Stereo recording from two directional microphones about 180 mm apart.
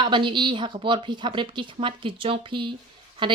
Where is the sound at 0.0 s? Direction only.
25° right (ahead or behind).